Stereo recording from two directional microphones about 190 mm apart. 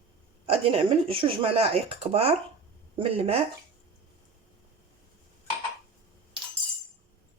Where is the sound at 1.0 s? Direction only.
30° right (ahead or behind).